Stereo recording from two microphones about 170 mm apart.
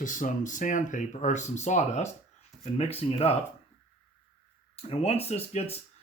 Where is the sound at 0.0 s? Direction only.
50° left (ahead or behind).